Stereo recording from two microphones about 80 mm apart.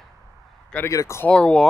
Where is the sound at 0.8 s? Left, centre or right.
Left.